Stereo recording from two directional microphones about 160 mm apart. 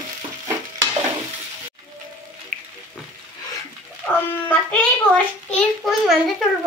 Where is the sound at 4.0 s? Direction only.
10° left (ahead or behind).